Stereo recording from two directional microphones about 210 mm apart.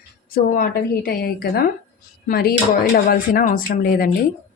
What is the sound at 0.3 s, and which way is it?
Speech, 45° left (ahead or behind).